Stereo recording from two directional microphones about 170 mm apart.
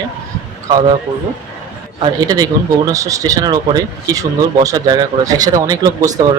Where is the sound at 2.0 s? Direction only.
20° right (ahead or behind).